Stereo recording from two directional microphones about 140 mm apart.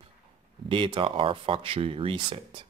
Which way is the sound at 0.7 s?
35° right (ahead or behind).